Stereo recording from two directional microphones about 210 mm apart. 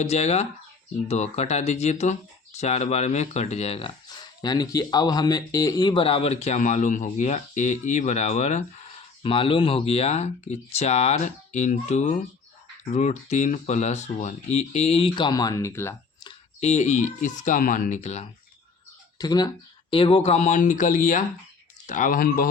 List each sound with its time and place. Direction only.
0.0 s speech: 30° left (ahead or behind); by 16.3 s 10° left (ahead or behind)
16.6 s speech: 30° left (ahead or behind)
19.2 s speech: 20° left (ahead or behind); by 22.4 s 40° left (ahead or behind)